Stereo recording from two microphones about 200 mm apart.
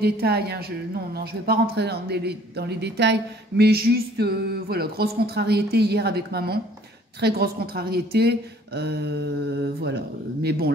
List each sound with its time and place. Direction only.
0.0 s a woman's voice: 55° right (ahead or behind)